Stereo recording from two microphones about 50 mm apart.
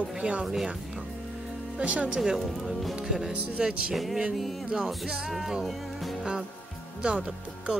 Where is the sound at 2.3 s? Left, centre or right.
Centre.